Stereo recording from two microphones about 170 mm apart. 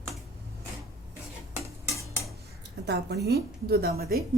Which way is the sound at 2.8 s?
75° right (ahead or behind).